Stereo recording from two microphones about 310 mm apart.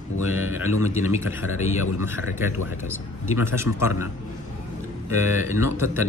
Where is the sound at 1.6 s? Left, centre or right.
Left.